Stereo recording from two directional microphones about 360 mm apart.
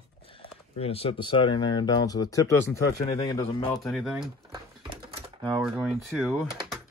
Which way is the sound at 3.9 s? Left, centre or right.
Centre.